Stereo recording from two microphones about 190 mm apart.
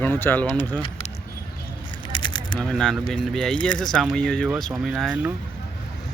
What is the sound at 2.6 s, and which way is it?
Speech, 5° left (ahead or behind).